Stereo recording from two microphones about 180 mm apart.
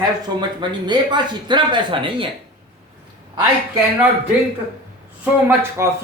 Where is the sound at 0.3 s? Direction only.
25° right (ahead or behind).